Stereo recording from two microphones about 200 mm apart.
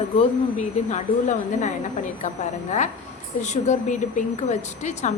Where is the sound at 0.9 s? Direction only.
35° left (ahead or behind).